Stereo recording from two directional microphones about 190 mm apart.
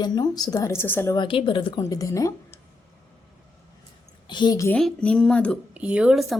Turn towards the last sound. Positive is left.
turn(degrees=0)  # may be behind; listen again after turning